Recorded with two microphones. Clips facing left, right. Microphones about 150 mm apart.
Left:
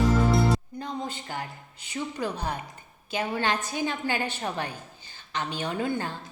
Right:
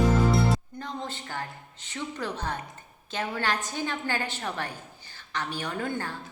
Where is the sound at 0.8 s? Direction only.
15° left (ahead or behind).